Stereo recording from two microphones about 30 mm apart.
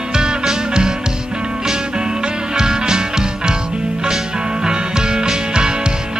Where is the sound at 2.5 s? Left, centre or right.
Right.